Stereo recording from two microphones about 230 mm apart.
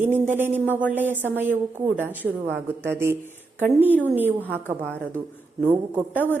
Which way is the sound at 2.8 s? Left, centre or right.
Centre.